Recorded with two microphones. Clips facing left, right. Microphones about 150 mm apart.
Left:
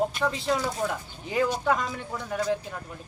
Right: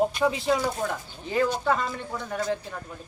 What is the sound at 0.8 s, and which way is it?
Speech, 10° left (ahead or behind).